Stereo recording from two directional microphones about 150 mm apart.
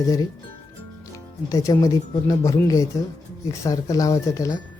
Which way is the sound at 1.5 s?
20° left (ahead or behind).